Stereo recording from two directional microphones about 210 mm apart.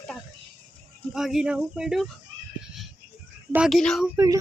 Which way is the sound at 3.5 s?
Centre (ahead or behind).